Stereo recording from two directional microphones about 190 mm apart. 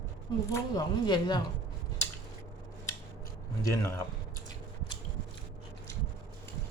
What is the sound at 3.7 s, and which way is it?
Speech, 15° left (ahead or behind).